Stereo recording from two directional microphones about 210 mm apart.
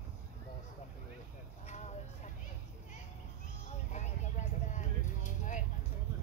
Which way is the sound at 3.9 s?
35° left (ahead or behind).